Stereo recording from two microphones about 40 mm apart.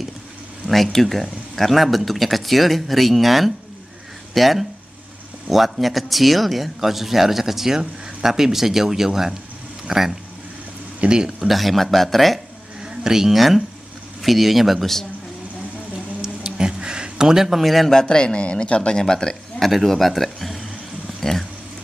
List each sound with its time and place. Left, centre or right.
0.9 s speech: centre
11.0 s speech: right
11.4 s speech: centre
12.8 s a man's voice: centre
16.2 s a sound: centre
17.9 s speech: left
19.6 s speech: centre